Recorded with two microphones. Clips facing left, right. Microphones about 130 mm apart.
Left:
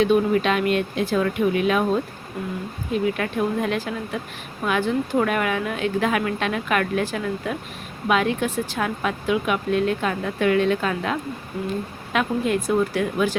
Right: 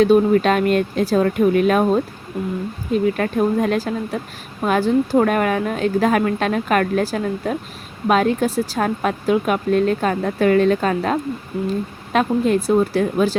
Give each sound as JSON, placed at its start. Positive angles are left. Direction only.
{"t": 0.0, "sound": "speech", "side_deg": -40}
{"t": 3.2, "sound": "speech", "side_deg": -40}